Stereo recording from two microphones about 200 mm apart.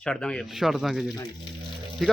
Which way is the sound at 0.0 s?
5° left (ahead or behind).